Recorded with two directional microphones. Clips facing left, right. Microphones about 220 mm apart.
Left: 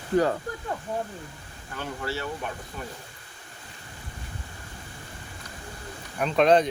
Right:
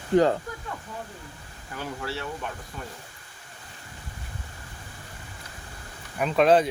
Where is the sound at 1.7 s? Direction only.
5° right (ahead or behind).